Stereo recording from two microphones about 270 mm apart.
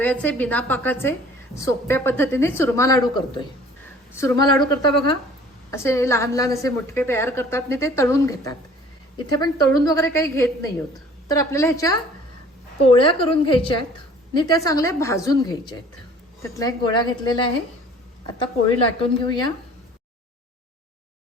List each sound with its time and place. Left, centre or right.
0.0 s a woman's voice: centre
19.0 s a woman's voice: centre